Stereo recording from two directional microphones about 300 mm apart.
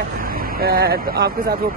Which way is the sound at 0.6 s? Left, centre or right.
Right.